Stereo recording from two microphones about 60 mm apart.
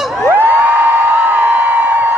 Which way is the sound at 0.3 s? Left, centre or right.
Right.